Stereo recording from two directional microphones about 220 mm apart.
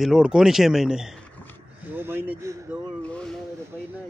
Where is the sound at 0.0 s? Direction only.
5° right (ahead or behind).